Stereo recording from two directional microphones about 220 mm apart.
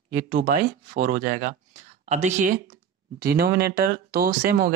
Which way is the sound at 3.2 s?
45° right (ahead or behind).